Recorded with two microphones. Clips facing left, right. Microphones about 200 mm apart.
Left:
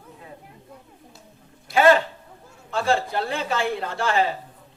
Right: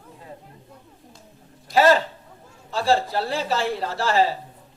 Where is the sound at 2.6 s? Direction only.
35° right (ahead or behind).